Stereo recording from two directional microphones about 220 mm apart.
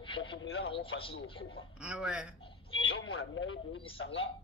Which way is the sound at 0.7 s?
25° left (ahead or behind).